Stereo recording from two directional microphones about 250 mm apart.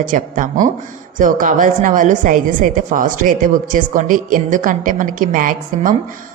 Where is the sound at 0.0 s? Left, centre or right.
Right.